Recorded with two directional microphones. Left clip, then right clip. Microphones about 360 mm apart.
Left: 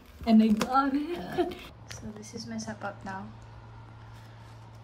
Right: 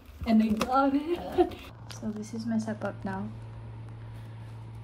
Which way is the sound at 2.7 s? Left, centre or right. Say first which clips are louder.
Right 2 dB; right.